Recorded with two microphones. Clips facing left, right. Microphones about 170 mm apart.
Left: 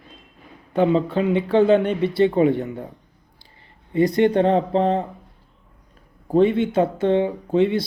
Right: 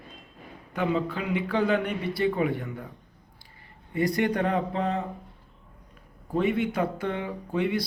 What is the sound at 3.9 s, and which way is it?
Speech, 20° left (ahead or behind).